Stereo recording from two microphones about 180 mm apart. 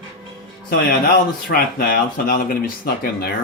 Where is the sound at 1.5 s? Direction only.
55° left (ahead or behind).